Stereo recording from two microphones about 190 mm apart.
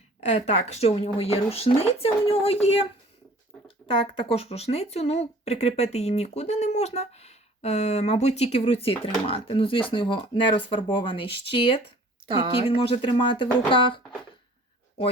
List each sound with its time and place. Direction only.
0.2 s speech: 35° left (ahead or behind)
3.8 s speech: 30° left (ahead or behind)
12.9 s speech: 25° left (ahead or behind)